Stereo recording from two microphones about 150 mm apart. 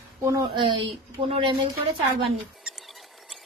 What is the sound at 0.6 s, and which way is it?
Speech, 35° right (ahead or behind).